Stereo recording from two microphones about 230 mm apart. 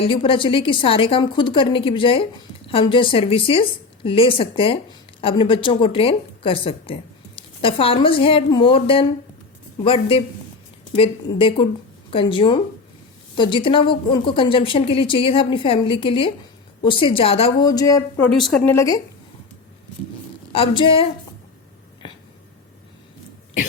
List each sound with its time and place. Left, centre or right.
0.0 s a woman's voice: left
18.3 s a woman's voice: centre
20.5 s a woman's voice: left
22.0 s a sound: centre